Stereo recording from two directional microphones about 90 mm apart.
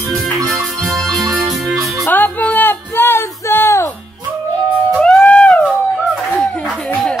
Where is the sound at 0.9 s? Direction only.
Centre (ahead or behind).